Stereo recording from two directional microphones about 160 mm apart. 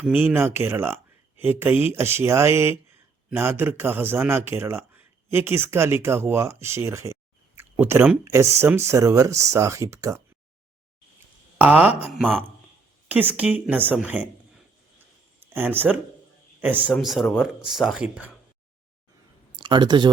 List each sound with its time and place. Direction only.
0.0 s a man's voice: 15° right (ahead or behind)
11.5 s speech: 10° right (ahead or behind)
12.1 s speech: 5° left (ahead or behind)
13.1 s a man's voice: 10° right (ahead or behind)
16.9 s speech: centre (ahead or behind)
19.5 s speech: 30° right (ahead or behind)